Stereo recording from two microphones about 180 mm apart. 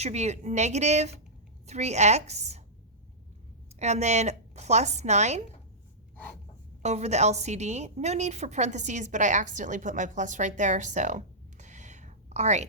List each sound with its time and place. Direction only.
0.0 s a woman's voice: 40° right (ahead or behind)
3.8 s a woman's voice: 40° right (ahead or behind)
6.8 s a woman's voice: 35° right (ahead or behind)